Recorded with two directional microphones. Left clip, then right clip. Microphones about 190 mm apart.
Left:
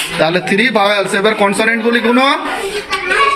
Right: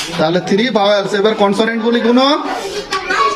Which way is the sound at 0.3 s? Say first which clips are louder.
Left 2 dB; 20° right (ahead or behind).